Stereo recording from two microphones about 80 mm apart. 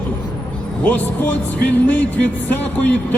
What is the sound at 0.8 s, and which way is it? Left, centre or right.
A man's voice, left.